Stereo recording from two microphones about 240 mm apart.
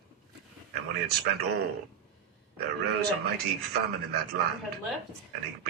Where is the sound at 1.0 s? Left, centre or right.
Right.